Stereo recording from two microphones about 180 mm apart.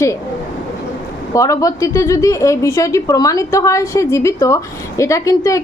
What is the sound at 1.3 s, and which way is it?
A woman's voice, 20° left (ahead or behind).